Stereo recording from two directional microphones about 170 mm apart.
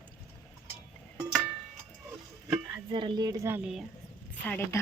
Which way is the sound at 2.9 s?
25° right (ahead or behind).